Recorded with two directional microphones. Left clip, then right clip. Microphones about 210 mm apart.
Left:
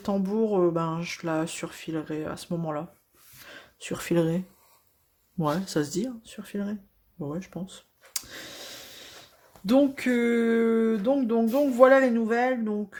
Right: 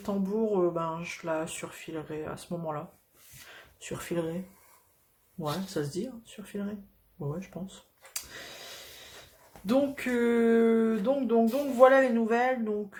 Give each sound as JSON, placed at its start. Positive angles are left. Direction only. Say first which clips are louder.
{"t": 0.0, "sound": "speech", "louder": "left 3 dB", "side_deg": 35}
{"t": 5.4, "sound": "speech", "louder": "left 6 dB", "side_deg": 45}
{"t": 7.3, "sound": "a sound", "louder": "left 3 dB", "side_deg": 35}
{"t": 9.6, "sound": "speech", "louder": "left 5 dB", "side_deg": 35}